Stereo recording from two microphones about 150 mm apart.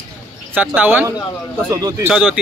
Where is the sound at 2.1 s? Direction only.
5° right (ahead or behind).